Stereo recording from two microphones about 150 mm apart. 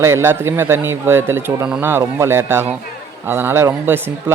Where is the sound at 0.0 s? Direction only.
15° right (ahead or behind).